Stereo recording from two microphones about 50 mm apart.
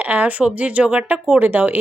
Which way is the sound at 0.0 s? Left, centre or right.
Right.